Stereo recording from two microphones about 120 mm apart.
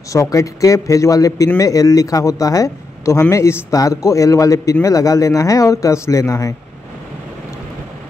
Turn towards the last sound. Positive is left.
turn(degrees=25)  # may be behind; listen again after turning